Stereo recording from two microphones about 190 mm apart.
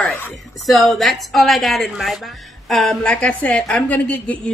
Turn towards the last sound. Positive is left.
turn(degrees=10)  # may be behind; listen again after turning